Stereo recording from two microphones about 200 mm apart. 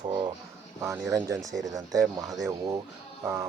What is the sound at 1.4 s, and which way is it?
Speech, centre (ahead or behind).